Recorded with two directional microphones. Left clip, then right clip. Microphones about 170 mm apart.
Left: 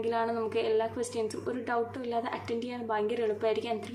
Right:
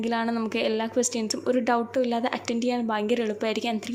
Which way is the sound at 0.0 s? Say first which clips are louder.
Right 2 dB; 35° right (ahead or behind).